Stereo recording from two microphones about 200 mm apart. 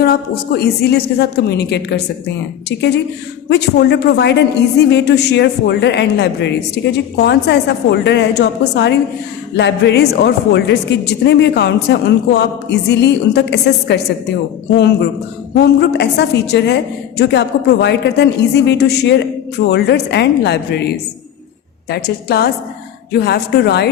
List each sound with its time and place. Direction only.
0.0 s a woman's voice: 50° left (ahead or behind)
3.5 s a woman's voice: 55° left (ahead or behind)